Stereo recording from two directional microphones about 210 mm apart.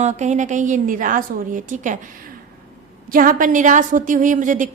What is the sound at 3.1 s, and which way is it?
A woman's voice, 40° right (ahead or behind).